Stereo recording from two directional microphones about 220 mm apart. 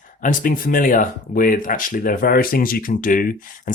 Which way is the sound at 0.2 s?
40° left (ahead or behind).